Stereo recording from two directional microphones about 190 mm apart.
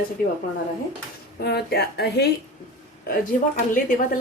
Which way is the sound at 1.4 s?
55° left (ahead or behind).